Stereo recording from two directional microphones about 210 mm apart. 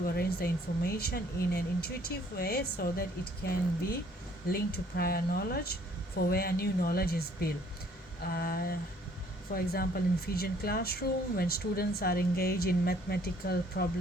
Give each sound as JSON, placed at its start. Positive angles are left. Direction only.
{"t": 0.0, "sound": "speech", "side_deg": 45}